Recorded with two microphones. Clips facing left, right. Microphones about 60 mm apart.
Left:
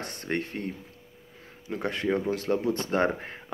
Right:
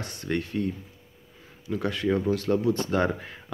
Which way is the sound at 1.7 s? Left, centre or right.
Left.